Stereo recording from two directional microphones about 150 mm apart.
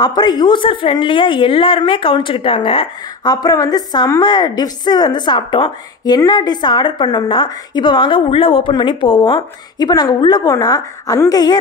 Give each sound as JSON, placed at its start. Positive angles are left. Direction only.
{"t": 0.0, "sound": "a woman's voice", "side_deg": 30}
{"t": 3.3, "sound": "a woman's voice", "side_deg": 25}